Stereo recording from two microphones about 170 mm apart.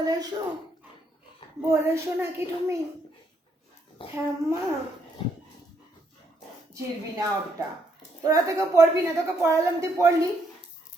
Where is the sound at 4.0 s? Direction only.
30° left (ahead or behind).